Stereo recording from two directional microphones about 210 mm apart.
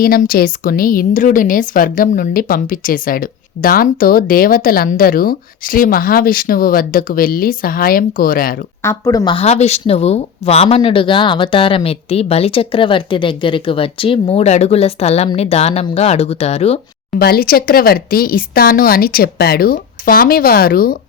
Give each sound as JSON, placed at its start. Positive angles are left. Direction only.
{"t": 0.0, "sound": "a woman's voice", "side_deg": 45}
{"t": 8.8, "sound": "speech", "side_deg": 15}
{"t": 17.2, "sound": "a woman's voice", "side_deg": 45}